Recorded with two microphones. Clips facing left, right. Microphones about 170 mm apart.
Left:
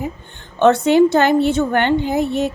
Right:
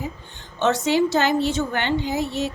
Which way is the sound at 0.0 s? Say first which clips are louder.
Left 5 dB; 55° left (ahead or behind).